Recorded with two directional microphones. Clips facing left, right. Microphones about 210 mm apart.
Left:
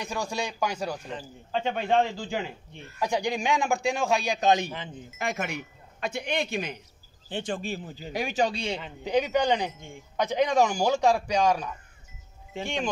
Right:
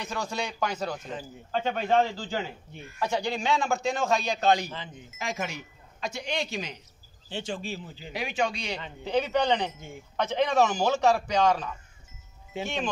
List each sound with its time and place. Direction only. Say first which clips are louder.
0.0 s a man's voice: left 1 dB; 10° left (ahead or behind)
5.2 s speech: left 2 dB; 60° left (ahead or behind); by 8.7 s 30° left (ahead or behind)
9.0 s a man's voice: left 1 dB; 15° left (ahead or behind)
9.8 s a man's voice: right 1 dB; 5° right (ahead or behind)
10.1 s a man's voice: left 1 dB; 15° left (ahead or behind)